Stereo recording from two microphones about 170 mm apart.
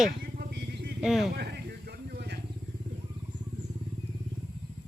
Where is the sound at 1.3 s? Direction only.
75° right (ahead or behind).